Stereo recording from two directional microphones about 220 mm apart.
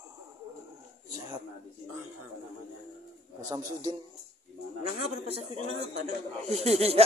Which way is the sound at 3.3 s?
15° right (ahead or behind).